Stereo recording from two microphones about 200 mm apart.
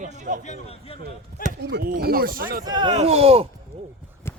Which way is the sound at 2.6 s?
20° right (ahead or behind).